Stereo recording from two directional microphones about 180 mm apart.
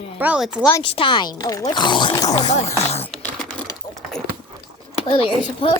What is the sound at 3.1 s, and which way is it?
Computer keyboard, 5° left (ahead or behind).